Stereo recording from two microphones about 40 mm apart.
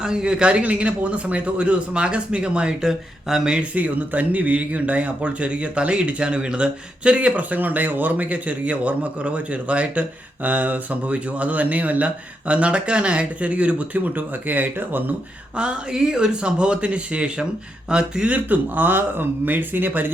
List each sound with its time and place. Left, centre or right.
0.0 s a man's voice: centre
2.8 s speech: centre
3.6 s speech: right
15.5 s a man's voice: right
18.3 s speech: right